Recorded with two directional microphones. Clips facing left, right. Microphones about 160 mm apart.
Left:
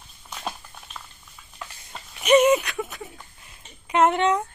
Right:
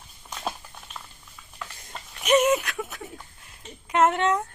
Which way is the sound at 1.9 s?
Centre (ahead or behind).